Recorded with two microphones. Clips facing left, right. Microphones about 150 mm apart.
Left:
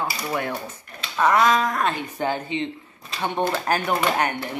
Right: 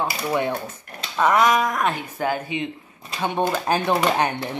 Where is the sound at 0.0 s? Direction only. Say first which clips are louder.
Right 3 dB; 20° right (ahead or behind).